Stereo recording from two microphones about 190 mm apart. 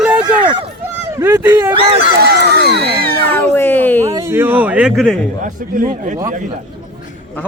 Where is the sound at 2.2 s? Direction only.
55° right (ahead or behind).